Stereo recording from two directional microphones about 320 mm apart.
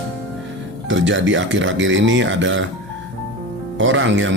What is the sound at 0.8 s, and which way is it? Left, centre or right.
Speech, right.